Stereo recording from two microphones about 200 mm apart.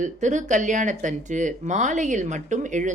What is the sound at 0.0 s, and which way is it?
Speech, 35° right (ahead or behind).